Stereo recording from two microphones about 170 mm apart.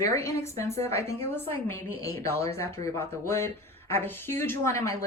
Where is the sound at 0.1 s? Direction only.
15° left (ahead or behind).